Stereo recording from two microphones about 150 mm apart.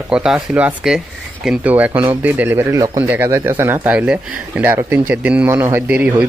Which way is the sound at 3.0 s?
10° right (ahead or behind).